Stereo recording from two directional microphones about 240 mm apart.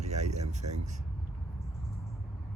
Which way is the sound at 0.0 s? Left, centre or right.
Right.